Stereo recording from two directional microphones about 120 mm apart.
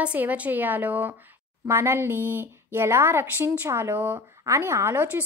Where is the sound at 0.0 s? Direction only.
10° right (ahead or behind).